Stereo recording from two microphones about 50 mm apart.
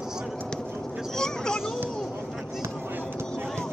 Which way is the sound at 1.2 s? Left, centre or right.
Centre.